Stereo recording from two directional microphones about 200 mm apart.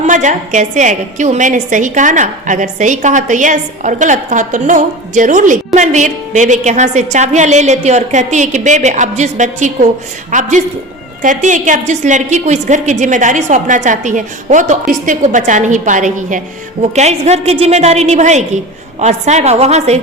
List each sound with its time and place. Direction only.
0.1 s a woman's voice: 35° right (ahead or behind)